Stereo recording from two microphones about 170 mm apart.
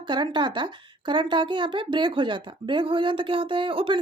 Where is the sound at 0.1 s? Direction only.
25° right (ahead or behind).